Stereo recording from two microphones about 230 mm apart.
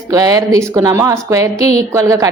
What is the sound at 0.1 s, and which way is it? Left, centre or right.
A woman's voice, centre.